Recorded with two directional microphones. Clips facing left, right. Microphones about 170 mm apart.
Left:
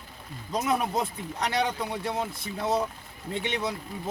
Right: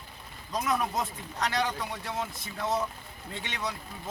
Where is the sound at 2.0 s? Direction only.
30° left (ahead or behind).